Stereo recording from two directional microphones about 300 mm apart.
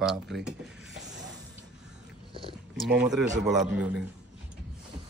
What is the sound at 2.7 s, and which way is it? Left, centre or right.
Speech, centre.